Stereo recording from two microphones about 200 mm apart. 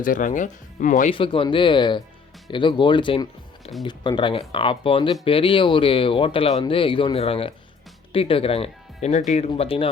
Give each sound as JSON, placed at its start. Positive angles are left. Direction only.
{"t": 0.0, "sound": "speech", "side_deg": 40}
{"t": 1.1, "sound": "speech", "side_deg": 25}